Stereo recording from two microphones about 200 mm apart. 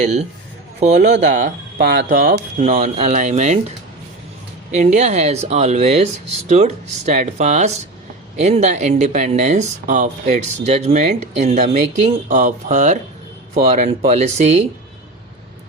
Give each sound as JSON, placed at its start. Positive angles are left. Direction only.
{"t": 0.0, "sound": "speech", "side_deg": -35}
{"t": 0.9, "sound": "speech", "side_deg": -55}
{"t": 4.7, "sound": "speech", "side_deg": -35}